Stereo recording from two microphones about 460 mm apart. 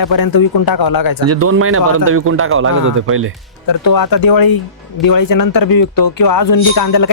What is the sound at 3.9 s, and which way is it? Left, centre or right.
Speech, left.